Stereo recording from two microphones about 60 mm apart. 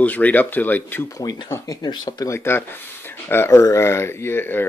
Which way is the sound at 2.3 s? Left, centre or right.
Left.